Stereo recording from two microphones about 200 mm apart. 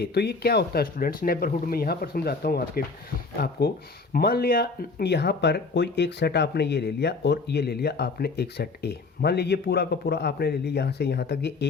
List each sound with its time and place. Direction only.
0.0 s speech: 55° left (ahead or behind)